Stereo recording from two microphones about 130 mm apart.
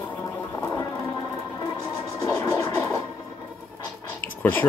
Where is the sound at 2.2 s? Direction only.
25° left (ahead or behind).